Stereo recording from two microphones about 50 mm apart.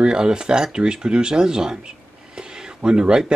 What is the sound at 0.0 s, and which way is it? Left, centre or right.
Speech, centre.